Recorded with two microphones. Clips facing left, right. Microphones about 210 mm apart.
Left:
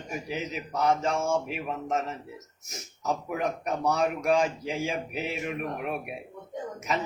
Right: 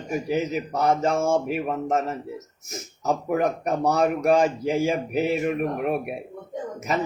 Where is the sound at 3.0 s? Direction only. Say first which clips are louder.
Right 6 dB; 45° right (ahead or behind).